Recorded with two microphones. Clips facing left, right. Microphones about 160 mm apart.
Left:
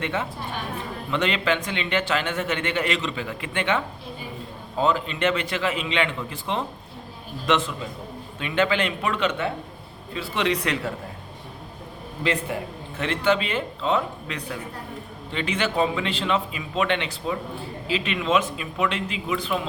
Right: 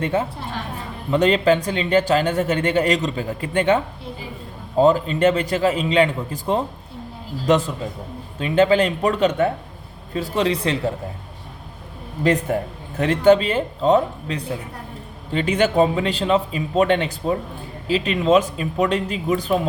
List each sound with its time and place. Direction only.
0.0 s a man's voice: 35° right (ahead or behind)
12.2 s a man's voice: 45° right (ahead or behind)